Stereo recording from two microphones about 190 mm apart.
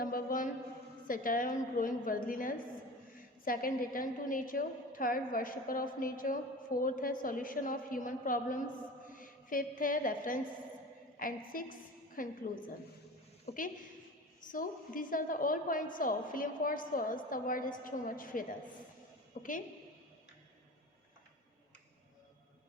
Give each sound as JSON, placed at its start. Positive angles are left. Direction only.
{"t": 0.0, "sound": "music", "side_deg": 45}
{"t": 1.0, "sound": "a woman's voice", "side_deg": 45}
{"t": 13.4, "sound": "a woman's voice", "side_deg": 45}